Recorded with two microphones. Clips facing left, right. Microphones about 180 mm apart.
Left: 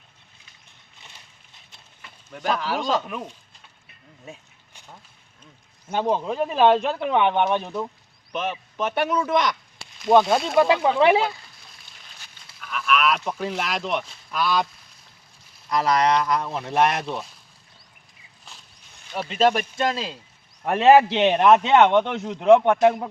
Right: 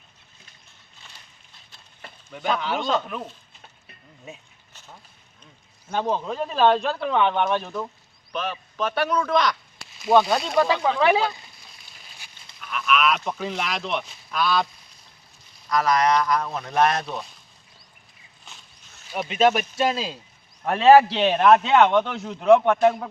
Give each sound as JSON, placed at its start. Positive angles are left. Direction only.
{"t": 2.3, "sound": "speech", "side_deg": 0}
{"t": 5.9, "sound": "speech", "side_deg": 15}
{"t": 9.0, "sound": "speech", "side_deg": 10}
{"t": 9.3, "sound": "speech", "side_deg": 20}
{"t": 10.2, "sound": "speech", "side_deg": 0}
{"t": 11.0, "sound": "speech", "side_deg": 20}
{"t": 12.0, "sound": "a sound", "side_deg": -5}
{"t": 14.3, "sound": "speech", "side_deg": 10}
{"t": 15.7, "sound": "speech", "side_deg": 30}
{"t": 19.1, "sound": "speech", "side_deg": -10}
{"t": 20.7, "sound": "speech", "side_deg": 15}